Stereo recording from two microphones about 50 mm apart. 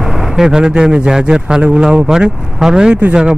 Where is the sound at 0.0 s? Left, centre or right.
Centre.